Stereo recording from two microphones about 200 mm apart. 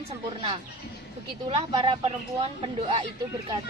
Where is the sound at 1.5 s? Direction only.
25° right (ahead or behind).